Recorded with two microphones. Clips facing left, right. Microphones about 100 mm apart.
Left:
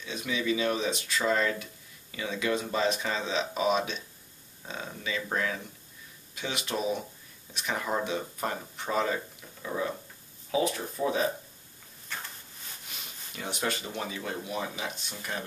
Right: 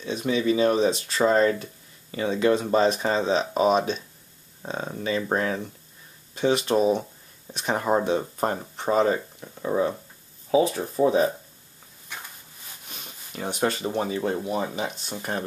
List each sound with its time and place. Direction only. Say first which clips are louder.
0.0 s speech: right 8 dB; 35° right (ahead or behind)
12.1 s a sound: even; 15° right (ahead or behind)
12.8 s speech: right 3 dB; 35° right (ahead or behind)